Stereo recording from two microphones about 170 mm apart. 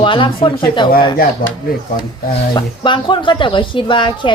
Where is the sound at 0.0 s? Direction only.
30° left (ahead or behind).